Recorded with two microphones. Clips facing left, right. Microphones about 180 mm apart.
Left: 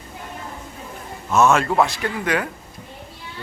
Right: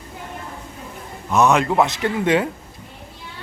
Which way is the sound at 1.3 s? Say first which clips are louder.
Even; 15° right (ahead or behind).